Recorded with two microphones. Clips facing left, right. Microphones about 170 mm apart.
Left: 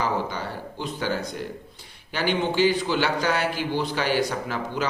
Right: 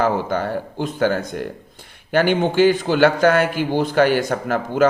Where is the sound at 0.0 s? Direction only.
50° right (ahead or behind).